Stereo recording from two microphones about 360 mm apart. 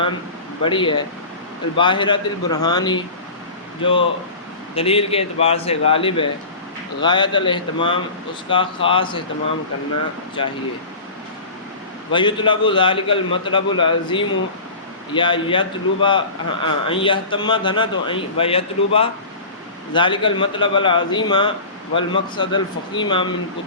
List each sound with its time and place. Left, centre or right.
0.6 s a man's voice: centre
12.1 s a man's voice: centre